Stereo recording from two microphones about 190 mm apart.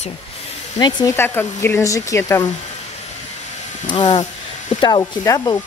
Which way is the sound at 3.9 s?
25° left (ahead or behind).